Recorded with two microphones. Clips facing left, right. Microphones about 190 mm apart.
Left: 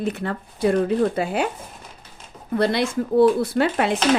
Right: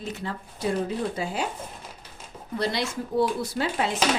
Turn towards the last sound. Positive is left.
turn(degrees=65)  # may be behind; listen again after turning